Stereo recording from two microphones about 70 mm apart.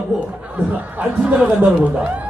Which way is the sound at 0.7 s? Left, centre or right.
Centre.